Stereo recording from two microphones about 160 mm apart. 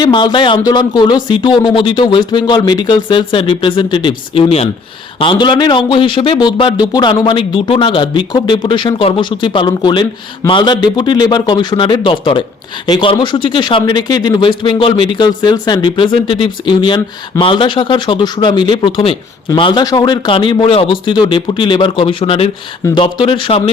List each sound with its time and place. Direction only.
0.0 s a man's voice: 30° left (ahead or behind)